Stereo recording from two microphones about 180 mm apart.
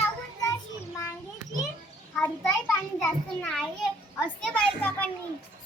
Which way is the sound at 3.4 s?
5° left (ahead or behind).